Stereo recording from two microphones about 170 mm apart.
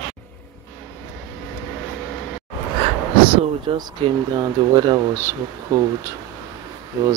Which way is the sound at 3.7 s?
30° right (ahead or behind).